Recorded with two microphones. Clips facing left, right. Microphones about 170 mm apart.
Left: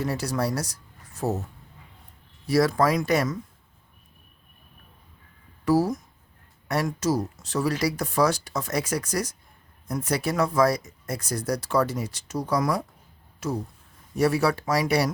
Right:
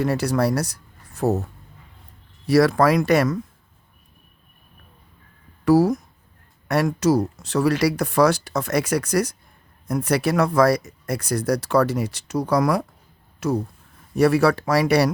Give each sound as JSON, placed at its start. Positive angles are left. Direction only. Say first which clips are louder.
{"t": 0.0, "sound": "speech", "louder": "right 6 dB", "side_deg": -65}
{"t": 2.5, "sound": "speech", "louder": "right 5 dB", "side_deg": -70}
{"t": 5.6, "sound": "speech", "louder": "right 6 dB", "side_deg": -70}
{"t": 14.2, "sound": "speech", "louder": "right 5 dB", "side_deg": -65}